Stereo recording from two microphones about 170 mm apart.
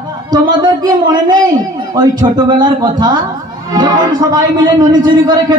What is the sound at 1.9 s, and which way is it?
A man's voice, 25° right (ahead or behind).